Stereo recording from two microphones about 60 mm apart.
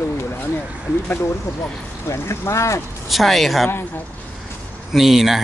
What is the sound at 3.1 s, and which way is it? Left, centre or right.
Speech, centre.